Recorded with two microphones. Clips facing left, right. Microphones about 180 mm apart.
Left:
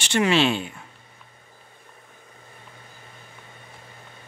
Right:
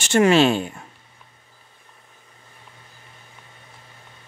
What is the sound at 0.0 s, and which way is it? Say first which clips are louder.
Speech: right 5 dB; 45° right (ahead or behind).